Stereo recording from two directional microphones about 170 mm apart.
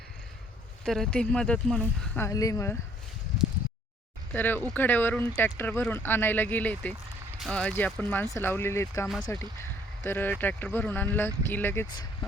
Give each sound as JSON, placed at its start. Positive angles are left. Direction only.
{"t": 0.9, "sound": "speech", "side_deg": 5}
{"t": 2.1, "sound": "speech", "side_deg": 20}
{"t": 4.3, "sound": "speech", "side_deg": 10}